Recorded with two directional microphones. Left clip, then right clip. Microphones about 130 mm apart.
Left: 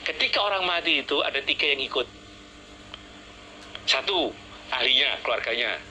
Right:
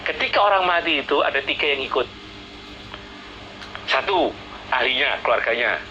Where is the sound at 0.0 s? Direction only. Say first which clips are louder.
Right 6 dB; 35° left (ahead or behind).